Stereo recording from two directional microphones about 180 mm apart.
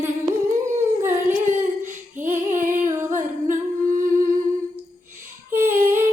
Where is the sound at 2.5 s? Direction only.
45° right (ahead or behind).